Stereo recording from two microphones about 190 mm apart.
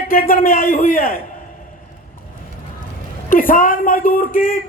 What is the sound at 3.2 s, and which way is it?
Speech, 45° left (ahead or behind).